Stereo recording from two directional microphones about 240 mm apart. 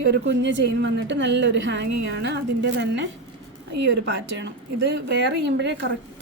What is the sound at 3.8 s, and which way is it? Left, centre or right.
A woman's voice, right.